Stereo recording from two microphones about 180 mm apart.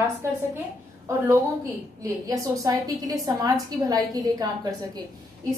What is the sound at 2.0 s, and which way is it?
A woman's voice, 20° right (ahead or behind).